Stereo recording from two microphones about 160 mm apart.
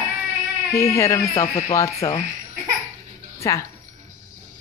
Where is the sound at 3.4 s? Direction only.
20° left (ahead or behind).